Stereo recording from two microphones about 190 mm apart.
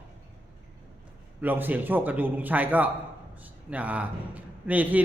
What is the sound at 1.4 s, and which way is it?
A man's voice, 10° right (ahead or behind).